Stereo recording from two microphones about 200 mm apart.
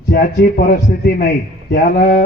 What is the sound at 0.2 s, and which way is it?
A man's voice, 40° left (ahead or behind).